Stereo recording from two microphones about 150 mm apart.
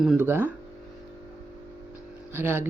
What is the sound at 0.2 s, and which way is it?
Speech, 15° right (ahead or behind).